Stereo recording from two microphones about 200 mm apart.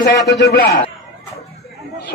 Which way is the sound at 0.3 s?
55° left (ahead or behind).